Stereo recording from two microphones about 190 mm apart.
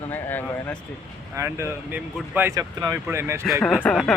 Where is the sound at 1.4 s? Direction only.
15° right (ahead or behind).